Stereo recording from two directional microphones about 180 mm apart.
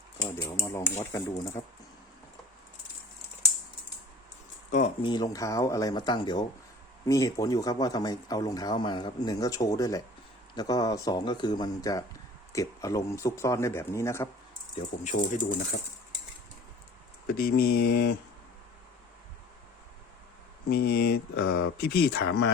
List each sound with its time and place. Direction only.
0.2 s speech: 20° left (ahead or behind)
5.0 s speech: 20° left (ahead or behind)
15.0 s speech: 50° left (ahead or behind)
17.2 s speech: 55° left (ahead or behind)
20.7 s speech: 60° left (ahead or behind)